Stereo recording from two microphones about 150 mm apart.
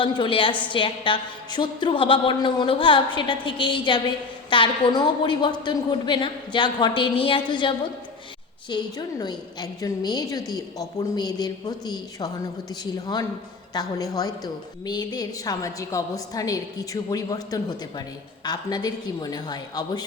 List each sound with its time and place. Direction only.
0.0 s a woman's voice: 35° left (ahead or behind)